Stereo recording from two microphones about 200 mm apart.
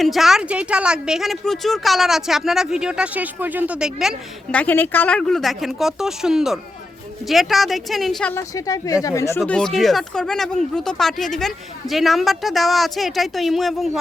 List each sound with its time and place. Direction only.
0.0 s speech: centre (ahead or behind)
4.5 s speech: 10° left (ahead or behind)
8.4 s speech: 15° left (ahead or behind)
9.4 s speech: 5° left (ahead or behind)